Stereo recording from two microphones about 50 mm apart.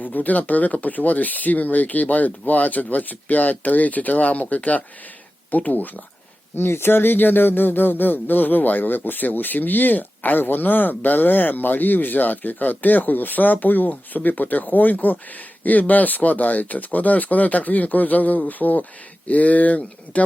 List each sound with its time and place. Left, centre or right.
0.0 s speech: left
6.6 s speech: left